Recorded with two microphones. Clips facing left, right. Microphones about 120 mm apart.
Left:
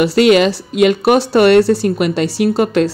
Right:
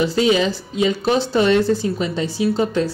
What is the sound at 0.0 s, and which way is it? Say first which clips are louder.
A woman's voice: left 6 dB; 70° left (ahead or behind).